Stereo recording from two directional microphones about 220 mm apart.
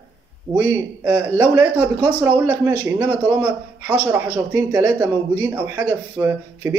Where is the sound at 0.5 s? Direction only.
5° right (ahead or behind).